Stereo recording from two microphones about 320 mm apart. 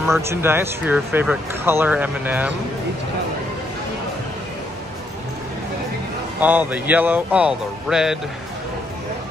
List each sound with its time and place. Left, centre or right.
0.0 s speech: centre
6.4 s speech: centre